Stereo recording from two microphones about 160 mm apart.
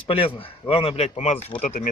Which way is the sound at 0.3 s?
35° left (ahead or behind).